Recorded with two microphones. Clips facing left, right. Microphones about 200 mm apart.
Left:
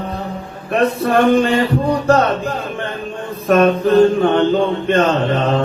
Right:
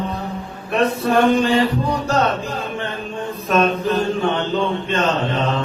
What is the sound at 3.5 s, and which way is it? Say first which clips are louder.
Mantra: left 6 dB; 55° left (ahead or behind).